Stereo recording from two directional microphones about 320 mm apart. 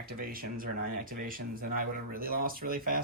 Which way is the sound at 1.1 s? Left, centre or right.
Right.